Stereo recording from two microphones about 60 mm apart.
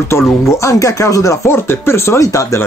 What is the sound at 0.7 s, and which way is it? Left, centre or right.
Speech, left.